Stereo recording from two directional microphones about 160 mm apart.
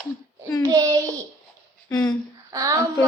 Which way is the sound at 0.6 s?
20° right (ahead or behind).